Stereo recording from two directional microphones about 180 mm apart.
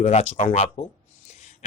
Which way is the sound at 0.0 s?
40° left (ahead or behind).